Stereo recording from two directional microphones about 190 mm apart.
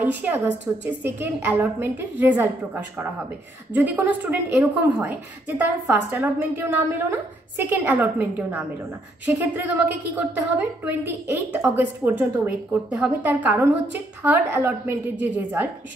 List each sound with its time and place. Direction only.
0.0 s a woman's voice: 10° right (ahead or behind)